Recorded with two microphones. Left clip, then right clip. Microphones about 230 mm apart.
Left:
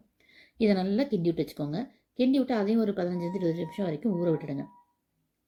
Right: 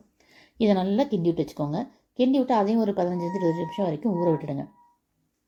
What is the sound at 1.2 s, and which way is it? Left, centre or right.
A woman's voice, right.